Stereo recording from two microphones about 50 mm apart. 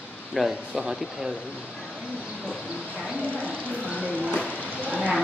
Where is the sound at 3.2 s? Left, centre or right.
Left.